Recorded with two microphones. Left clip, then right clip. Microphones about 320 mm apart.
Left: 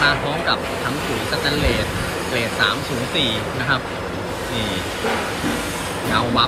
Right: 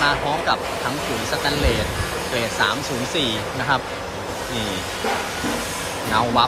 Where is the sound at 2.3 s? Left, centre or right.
Centre.